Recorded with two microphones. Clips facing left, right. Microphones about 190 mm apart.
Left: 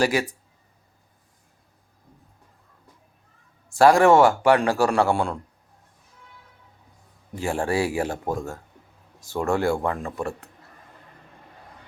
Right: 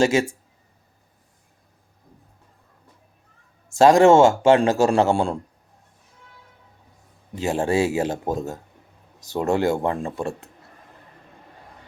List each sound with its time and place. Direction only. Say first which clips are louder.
0.0 s a man's voice: right 3 dB; 25° right (ahead or behind)
3.8 s a man's voice: right 2 dB; 20° right (ahead or behind)
7.3 s a man's voice: right 3 dB; 20° right (ahead or behind)